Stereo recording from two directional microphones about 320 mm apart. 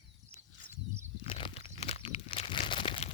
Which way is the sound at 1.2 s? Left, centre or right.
Centre.